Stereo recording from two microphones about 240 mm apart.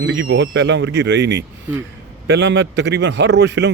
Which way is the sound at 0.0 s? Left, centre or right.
Right.